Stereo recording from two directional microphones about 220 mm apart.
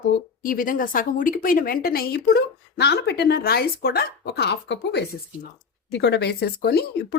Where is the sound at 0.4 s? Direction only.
40° left (ahead or behind).